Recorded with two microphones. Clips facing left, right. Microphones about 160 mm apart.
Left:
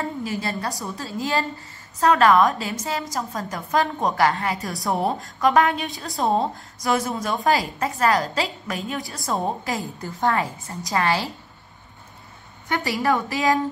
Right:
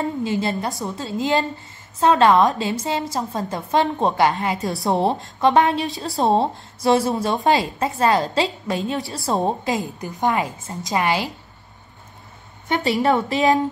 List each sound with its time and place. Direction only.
0.2 s a woman's voice: 25° right (ahead or behind)
9.8 s a woman's voice: 15° right (ahead or behind)
12.6 s a woman's voice: 25° right (ahead or behind)